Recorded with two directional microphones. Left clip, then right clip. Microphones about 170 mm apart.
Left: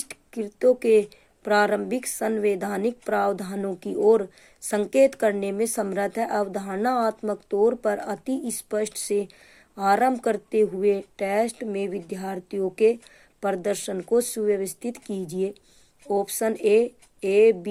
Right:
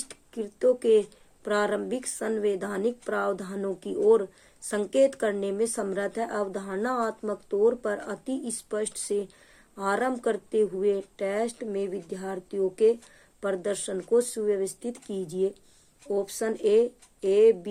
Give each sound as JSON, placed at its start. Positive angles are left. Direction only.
{"t": 0.1, "sound": "speech", "side_deg": 35}